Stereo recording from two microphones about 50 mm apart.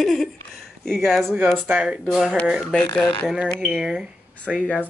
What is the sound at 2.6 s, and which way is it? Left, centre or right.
Speech, centre.